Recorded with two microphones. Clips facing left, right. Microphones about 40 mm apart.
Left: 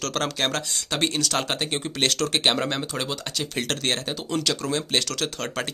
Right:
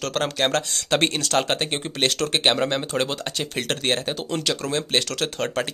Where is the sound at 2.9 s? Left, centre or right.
Right.